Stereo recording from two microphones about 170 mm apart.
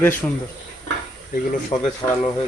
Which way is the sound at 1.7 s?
25° left (ahead or behind).